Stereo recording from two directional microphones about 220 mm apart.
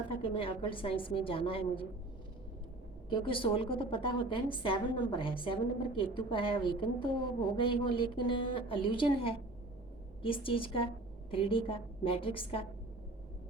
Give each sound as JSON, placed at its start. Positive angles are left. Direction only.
{"t": 0.2, "sound": "a woman's voice", "side_deg": 25}
{"t": 3.1, "sound": "a woman's voice", "side_deg": 25}